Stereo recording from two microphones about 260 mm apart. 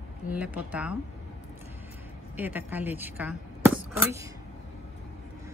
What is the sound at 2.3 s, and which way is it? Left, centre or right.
Speech, centre.